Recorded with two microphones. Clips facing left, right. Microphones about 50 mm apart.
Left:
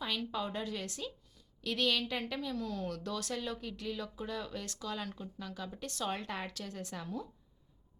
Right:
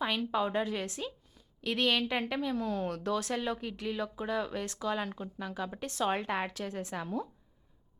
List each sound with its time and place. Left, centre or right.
0.0 s a woman's voice: right